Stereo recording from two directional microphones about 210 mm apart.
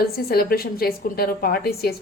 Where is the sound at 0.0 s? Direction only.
45° left (ahead or behind).